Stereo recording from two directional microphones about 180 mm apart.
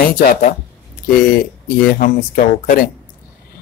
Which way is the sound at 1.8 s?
50° left (ahead or behind).